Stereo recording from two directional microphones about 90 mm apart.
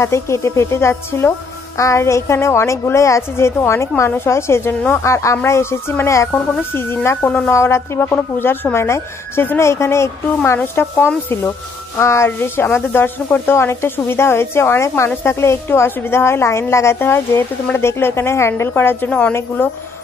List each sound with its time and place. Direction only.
0.0 s a woman's voice: 30° left (ahead or behind)
7.5 s a woman's voice: 30° left (ahead or behind)